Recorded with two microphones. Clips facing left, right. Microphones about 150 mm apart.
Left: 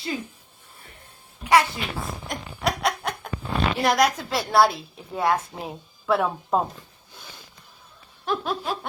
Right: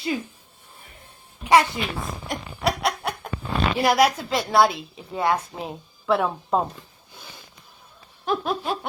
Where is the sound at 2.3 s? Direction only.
5° right (ahead or behind).